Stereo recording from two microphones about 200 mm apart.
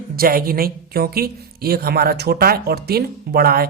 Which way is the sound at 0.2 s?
45° right (ahead or behind).